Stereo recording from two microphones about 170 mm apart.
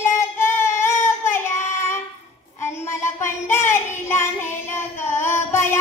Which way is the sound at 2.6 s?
15° left (ahead or behind).